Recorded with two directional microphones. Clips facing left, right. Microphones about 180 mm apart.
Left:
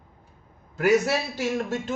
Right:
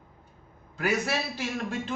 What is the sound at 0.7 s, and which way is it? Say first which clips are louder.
Speech: left 7 dB; 45° left (ahead or behind).